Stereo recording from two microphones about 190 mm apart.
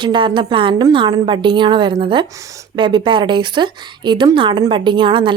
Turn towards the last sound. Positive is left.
turn(degrees=-25)  # may be behind; listen again after turning